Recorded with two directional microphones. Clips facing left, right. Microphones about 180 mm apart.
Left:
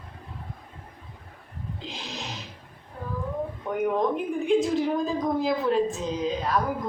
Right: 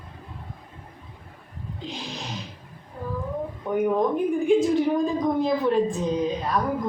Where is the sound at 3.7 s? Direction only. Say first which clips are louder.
Right 3 dB; centre (ahead or behind).